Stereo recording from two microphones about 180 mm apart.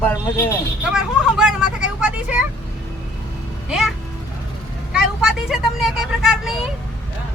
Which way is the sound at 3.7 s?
Centre (ahead or behind).